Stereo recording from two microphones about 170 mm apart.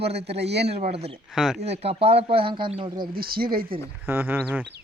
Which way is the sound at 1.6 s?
40° right (ahead or behind).